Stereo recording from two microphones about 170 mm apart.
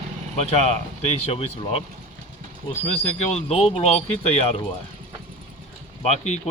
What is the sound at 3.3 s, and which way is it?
Speech, 40° left (ahead or behind).